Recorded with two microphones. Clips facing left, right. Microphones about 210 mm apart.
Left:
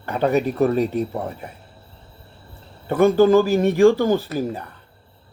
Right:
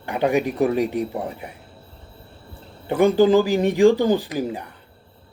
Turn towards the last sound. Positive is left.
turn(degrees=-15)  # may be behind; listen again after turning